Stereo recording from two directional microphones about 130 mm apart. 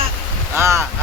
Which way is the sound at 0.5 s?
20° right (ahead or behind).